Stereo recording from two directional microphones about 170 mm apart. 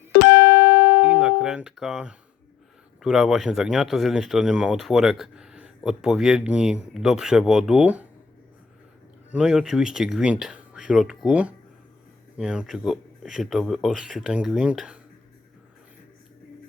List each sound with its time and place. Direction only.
0.1 s music: 60° left (ahead or behind)
1.0 s speech: 5° right (ahead or behind)
9.3 s speech: 5° right (ahead or behind)